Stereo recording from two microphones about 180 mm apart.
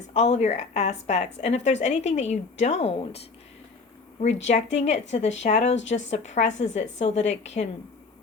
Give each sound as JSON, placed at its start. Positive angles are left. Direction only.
{"t": 0.1, "sound": "speech", "side_deg": 40}
{"t": 4.5, "sound": "speech", "side_deg": 40}